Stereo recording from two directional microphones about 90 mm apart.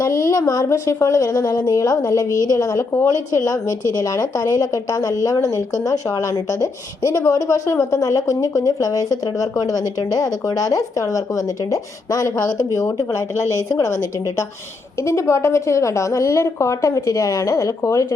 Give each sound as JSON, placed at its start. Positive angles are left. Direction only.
{"t": 0.0, "sound": "a woman's voice", "side_deg": 35}